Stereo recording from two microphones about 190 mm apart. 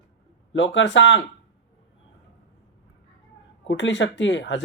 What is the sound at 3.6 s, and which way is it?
Speech, 70° left (ahead or behind).